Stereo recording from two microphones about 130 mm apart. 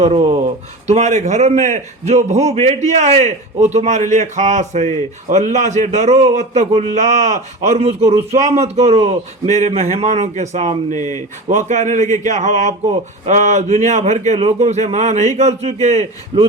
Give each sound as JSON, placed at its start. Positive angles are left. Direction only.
{"t": 0.0, "sound": "speech", "side_deg": -50}
{"t": 0.9, "sound": "a man's voice", "side_deg": -60}